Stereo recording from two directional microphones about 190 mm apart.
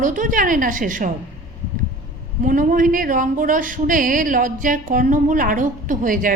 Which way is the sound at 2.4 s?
45° right (ahead or behind).